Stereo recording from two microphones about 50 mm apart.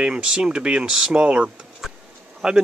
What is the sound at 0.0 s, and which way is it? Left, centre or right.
Speech, centre.